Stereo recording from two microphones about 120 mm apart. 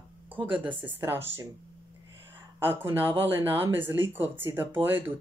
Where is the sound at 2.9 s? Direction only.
20° right (ahead or behind).